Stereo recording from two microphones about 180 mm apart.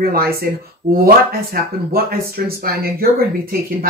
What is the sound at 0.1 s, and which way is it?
Speech, 60° right (ahead or behind).